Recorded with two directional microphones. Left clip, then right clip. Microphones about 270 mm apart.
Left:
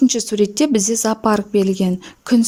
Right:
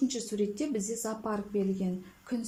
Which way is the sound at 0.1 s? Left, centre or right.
Left.